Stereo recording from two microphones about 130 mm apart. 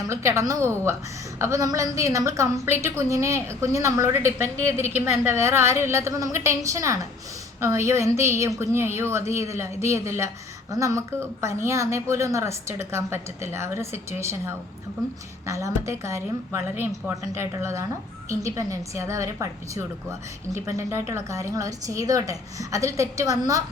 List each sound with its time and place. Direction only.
0.1 s a woman's voice: 20° right (ahead or behind)